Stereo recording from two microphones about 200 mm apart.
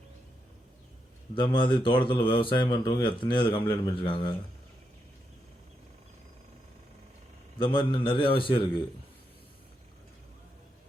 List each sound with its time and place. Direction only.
1.4 s speech: 25° left (ahead or behind)
7.6 s speech: 25° left (ahead or behind)